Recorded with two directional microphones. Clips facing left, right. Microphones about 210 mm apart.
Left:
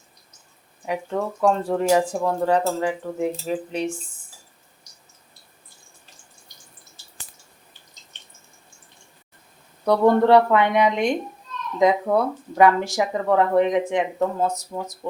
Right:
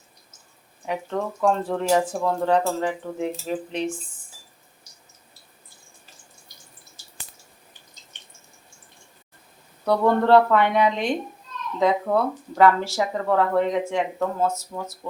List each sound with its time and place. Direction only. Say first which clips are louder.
0.9 s speech: left 1 dB; 10° left (ahead or behind)
9.8 s speech: left 3 dB; 15° left (ahead or behind)